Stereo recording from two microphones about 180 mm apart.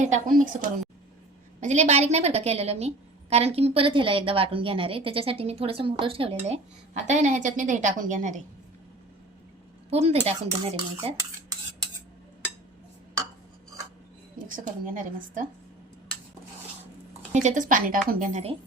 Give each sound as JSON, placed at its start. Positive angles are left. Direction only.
{"t": 0.0, "sound": "a woman's voice", "side_deg": -45}
{"t": 9.9, "sound": "a woman's voice", "side_deg": -35}
{"t": 14.3, "sound": "a woman's voice", "side_deg": -50}
{"t": 17.3, "sound": "a woman's voice", "side_deg": -45}